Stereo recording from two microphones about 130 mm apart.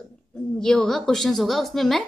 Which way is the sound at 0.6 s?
5° left (ahead or behind).